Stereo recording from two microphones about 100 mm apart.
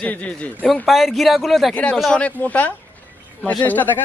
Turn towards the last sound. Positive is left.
turn(degrees=20)  # may be behind; listen again after turning